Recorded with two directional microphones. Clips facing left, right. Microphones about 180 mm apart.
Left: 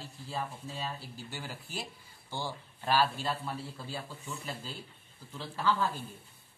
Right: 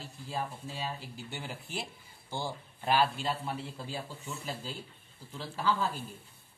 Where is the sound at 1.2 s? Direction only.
20° right (ahead or behind).